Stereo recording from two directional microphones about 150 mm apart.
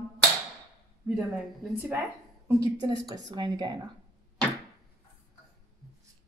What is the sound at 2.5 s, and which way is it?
A woman's voice, 25° right (ahead or behind).